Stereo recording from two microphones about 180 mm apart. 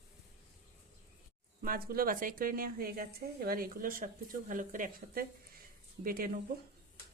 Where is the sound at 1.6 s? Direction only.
55° right (ahead or behind).